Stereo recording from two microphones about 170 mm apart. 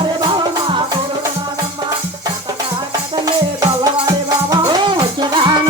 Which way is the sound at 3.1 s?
25° right (ahead or behind).